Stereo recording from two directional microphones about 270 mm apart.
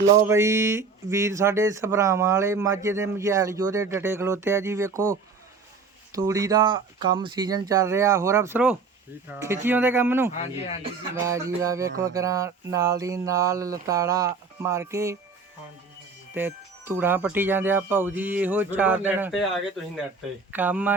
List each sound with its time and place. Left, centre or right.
0.2 s speech: centre
6.1 s speech: centre
16.3 s speech: centre
20.5 s speech: centre